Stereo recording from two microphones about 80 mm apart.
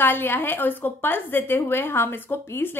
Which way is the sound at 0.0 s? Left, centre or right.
Left.